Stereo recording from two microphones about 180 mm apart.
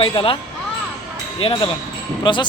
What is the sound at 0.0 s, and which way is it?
Speech, 30° left (ahead or behind).